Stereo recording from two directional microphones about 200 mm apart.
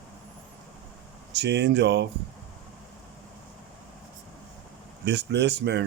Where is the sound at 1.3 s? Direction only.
60° right (ahead or behind).